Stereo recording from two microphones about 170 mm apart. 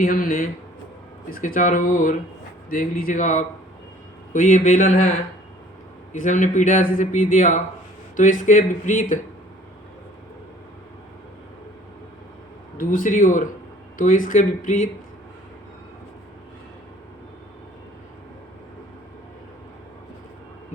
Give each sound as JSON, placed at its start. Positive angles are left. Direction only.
{"t": 0.0, "sound": "a man's voice", "side_deg": 55}
{"t": 6.1, "sound": "a man's voice", "side_deg": 50}
{"t": 12.7, "sound": "a man's voice", "side_deg": 55}